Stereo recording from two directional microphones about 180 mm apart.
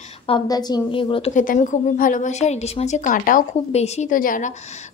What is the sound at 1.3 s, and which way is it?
Speech, 45° left (ahead or behind).